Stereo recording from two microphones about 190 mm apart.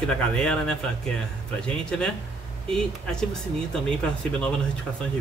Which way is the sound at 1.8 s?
5° left (ahead or behind).